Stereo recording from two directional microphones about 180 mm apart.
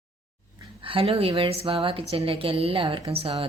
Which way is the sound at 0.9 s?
30° right (ahead or behind).